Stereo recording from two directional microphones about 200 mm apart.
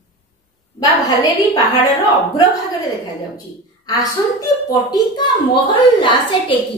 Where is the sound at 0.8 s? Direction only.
20° left (ahead or behind).